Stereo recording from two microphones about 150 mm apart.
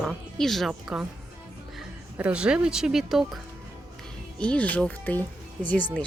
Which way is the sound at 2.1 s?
10° right (ahead or behind).